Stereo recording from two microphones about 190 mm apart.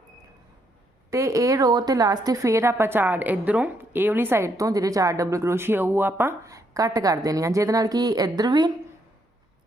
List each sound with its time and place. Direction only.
1.1 s a woman's voice: 15° right (ahead or behind)